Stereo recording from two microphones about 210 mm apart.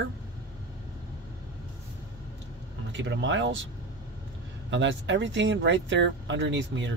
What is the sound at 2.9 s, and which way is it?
Speech, 60° right (ahead or behind).